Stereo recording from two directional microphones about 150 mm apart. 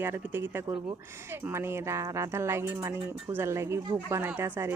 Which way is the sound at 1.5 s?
15° right (ahead or behind).